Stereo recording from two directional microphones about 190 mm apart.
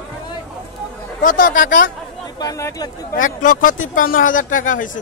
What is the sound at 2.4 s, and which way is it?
Speech, 15° left (ahead or behind).